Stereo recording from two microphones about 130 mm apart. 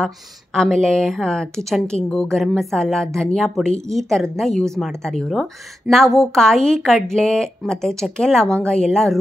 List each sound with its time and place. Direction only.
0.6 s a woman's voice: 5° left (ahead or behind)